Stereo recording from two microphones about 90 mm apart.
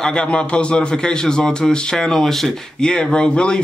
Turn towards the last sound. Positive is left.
turn(degrees=10)  # may be behind; listen again after turning